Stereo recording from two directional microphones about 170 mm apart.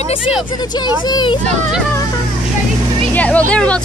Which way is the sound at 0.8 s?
25° left (ahead or behind).